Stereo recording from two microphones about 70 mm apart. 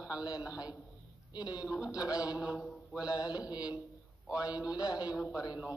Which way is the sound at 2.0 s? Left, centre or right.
Left.